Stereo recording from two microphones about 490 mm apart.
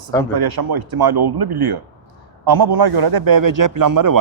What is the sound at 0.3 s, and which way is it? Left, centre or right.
A man's voice, right.